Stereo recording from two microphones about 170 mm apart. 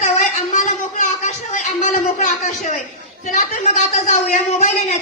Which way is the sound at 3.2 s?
45° left (ahead or behind).